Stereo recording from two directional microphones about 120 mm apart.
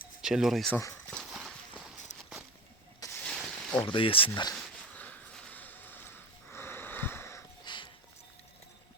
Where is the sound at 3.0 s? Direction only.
30° left (ahead or behind).